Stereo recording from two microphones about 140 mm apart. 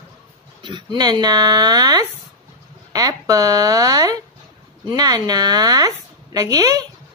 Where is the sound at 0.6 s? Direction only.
35° right (ahead or behind).